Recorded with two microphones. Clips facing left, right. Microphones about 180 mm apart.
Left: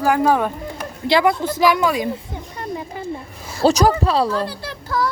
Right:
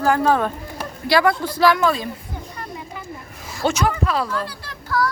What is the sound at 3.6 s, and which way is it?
Speech, 35° left (ahead or behind).